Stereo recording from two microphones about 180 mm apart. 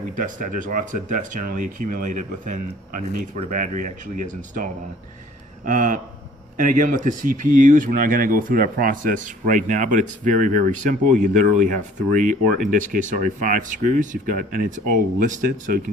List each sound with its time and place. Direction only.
0.2 s speech: 45° right (ahead or behind)